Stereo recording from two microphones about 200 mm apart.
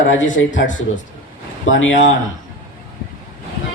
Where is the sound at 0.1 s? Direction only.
70° left (ahead or behind).